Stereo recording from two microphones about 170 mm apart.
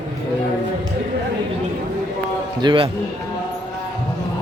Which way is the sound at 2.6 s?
25° right (ahead or behind).